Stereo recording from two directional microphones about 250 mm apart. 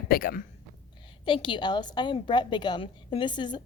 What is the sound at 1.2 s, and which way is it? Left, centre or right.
A woman's voice, centre.